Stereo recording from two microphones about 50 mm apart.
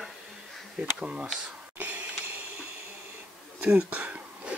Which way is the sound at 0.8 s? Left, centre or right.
Right.